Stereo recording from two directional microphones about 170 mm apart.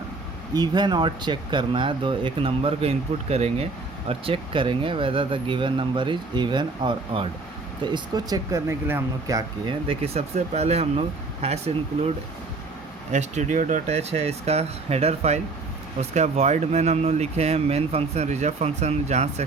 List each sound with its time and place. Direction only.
0.5 s speech: 25° right (ahead or behind)
9.8 s speech: 35° right (ahead or behind)